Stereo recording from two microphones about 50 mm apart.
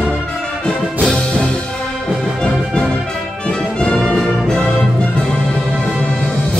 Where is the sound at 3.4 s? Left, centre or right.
Centre.